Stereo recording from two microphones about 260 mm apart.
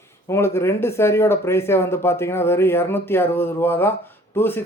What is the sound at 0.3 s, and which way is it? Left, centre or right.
Speech, centre.